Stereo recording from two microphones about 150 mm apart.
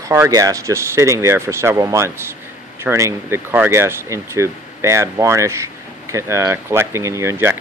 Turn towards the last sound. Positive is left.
turn(degrees=-15)  # may be behind; listen again after turning